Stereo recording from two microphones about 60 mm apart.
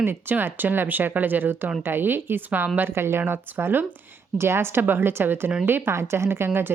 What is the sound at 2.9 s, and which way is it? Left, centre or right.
A woman's voice, right.